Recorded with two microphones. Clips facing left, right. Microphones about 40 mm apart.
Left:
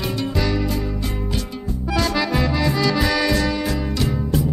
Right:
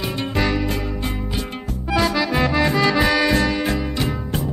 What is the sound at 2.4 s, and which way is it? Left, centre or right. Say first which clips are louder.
Accordion: right 2 dB; right.